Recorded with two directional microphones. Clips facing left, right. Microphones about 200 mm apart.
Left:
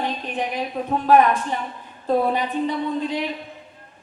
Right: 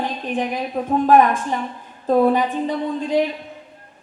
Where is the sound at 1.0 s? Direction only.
50° right (ahead or behind).